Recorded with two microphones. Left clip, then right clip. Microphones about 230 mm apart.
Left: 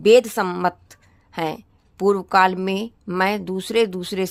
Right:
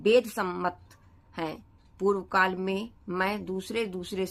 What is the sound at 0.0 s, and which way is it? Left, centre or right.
A woman's voice, left.